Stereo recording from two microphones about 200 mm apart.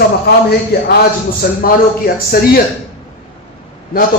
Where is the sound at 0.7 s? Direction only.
50° left (ahead or behind).